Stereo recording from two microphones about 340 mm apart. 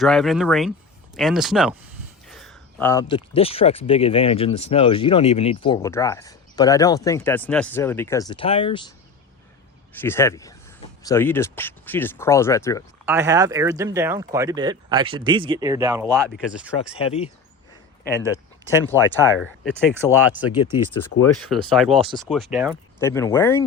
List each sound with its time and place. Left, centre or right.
0.0 s speech: centre
9.9 s speech: centre
13.1 s speech: centre
17.0 s speech: centre
18.7 s speech: centre